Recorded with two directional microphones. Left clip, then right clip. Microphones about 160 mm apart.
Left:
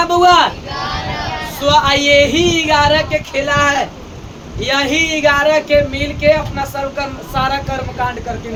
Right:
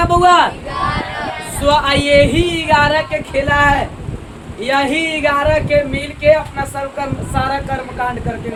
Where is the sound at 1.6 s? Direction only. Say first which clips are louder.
Left 2 dB; centre (ahead or behind); by 6.6 s 20° left (ahead or behind).